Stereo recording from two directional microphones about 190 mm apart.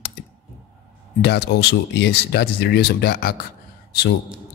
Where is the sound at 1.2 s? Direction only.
60° left (ahead or behind).